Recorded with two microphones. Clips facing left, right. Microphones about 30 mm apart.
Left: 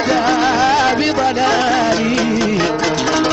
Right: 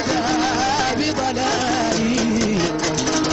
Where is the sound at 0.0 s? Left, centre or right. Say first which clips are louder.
Left 5 dB; left.